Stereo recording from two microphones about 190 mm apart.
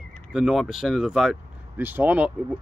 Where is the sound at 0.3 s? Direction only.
Centre (ahead or behind).